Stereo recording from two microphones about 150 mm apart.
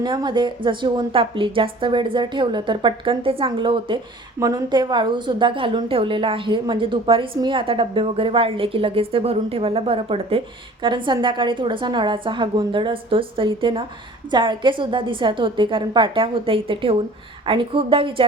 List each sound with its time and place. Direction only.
0.0 s a woman's voice: 30° right (ahead or behind)
4.4 s a woman's voice: 25° right (ahead or behind)